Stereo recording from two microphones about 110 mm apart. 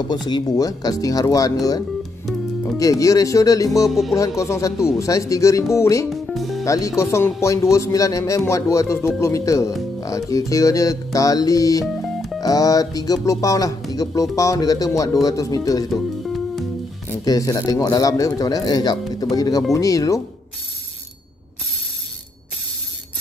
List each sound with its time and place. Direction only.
0.1 s speech: 40° left (ahead or behind)
6.0 s music: centre (ahead or behind)
6.6 s speech: 30° left (ahead or behind)
11.8 s music: centre (ahead or behind)
12.4 s speech: 35° left (ahead or behind)
17.2 s speech: 30° left (ahead or behind)